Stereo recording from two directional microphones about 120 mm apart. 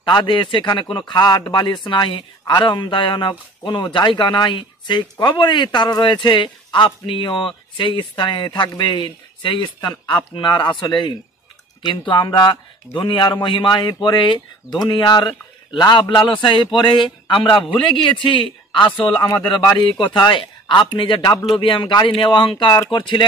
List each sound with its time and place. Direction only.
0.0 s speech: 40° left (ahead or behind)